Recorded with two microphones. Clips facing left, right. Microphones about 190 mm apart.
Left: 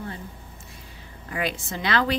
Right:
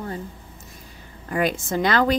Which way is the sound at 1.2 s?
45° right (ahead or behind).